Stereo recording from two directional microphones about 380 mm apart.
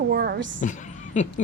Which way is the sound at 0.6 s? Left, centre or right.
Centre.